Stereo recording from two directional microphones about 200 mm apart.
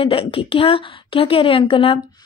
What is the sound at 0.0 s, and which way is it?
Speech, 25° left (ahead or behind).